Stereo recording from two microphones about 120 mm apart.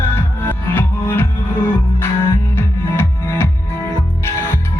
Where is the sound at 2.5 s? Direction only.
20° left (ahead or behind).